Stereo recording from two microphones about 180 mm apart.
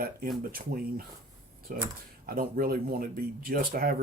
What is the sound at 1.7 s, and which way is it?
Speech, 50° right (ahead or behind).